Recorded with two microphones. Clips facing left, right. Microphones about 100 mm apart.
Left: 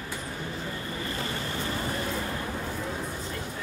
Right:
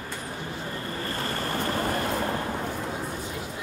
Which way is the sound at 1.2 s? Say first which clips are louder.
Right 4 dB; 55° right (ahead or behind).